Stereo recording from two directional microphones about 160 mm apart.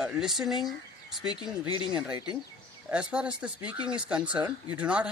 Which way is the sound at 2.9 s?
5° right (ahead or behind).